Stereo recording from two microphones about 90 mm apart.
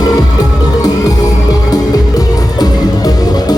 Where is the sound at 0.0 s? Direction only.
45° left (ahead or behind).